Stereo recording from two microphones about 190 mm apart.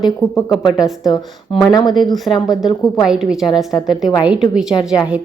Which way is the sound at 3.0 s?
5° right (ahead or behind).